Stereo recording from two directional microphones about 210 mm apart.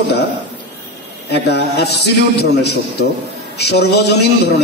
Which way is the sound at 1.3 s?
55° left (ahead or behind).